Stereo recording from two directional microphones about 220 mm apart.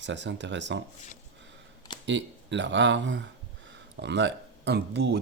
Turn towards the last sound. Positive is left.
turn(degrees=-50)  # may be behind; listen again after turning